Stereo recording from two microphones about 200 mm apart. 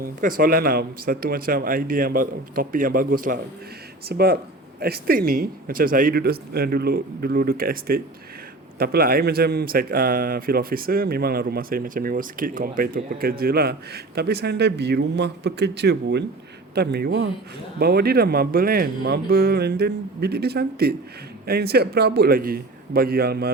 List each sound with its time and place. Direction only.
0.0 s speech: 45° right (ahead or behind)